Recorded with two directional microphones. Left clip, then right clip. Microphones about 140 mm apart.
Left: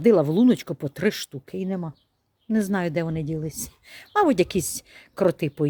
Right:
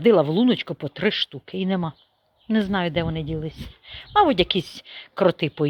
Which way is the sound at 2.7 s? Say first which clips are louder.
Right 2 dB; 40° left (ahead or behind).